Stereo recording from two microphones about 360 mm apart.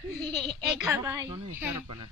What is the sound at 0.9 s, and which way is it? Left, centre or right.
Speech, centre.